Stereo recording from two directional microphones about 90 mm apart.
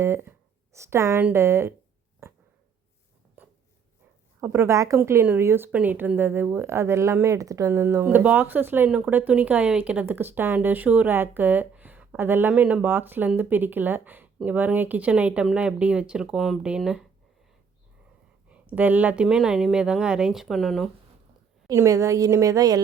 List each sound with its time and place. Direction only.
0.0 s speech: 30° right (ahead or behind)
3.4 s writing: 20° right (ahead or behind)
4.4 s speech: 30° right (ahead or behind); by 17.1 s 5° right (ahead or behind)
18.7 s speech: 15° right (ahead or behind); by 20.9 s 5° left (ahead or behind)
21.7 s a woman's voice: 35° right (ahead or behind)